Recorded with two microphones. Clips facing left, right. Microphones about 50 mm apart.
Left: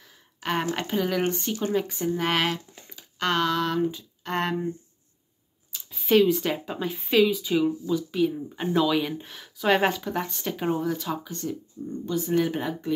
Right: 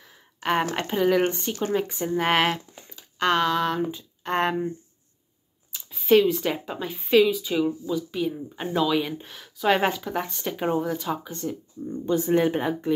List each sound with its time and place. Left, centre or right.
0.0 s a sound: centre
0.7 s speech: centre
5.7 s speech: centre